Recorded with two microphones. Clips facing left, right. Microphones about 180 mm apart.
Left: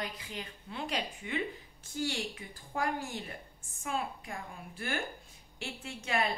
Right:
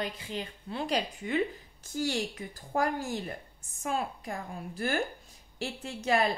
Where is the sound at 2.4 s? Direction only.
45° right (ahead or behind).